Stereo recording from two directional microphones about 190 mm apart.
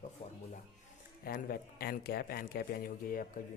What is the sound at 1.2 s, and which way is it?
Speech, 55° left (ahead or behind).